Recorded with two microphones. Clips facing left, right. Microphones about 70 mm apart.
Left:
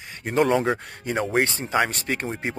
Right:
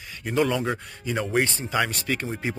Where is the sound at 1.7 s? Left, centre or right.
Left.